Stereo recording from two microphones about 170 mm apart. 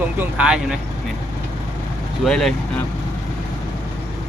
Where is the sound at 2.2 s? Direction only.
Centre (ahead or behind).